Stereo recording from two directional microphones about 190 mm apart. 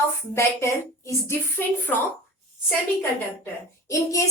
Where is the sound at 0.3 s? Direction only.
15° left (ahead or behind).